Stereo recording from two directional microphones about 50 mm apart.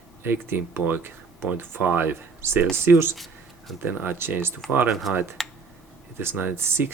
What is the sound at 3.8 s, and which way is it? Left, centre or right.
Speech, right.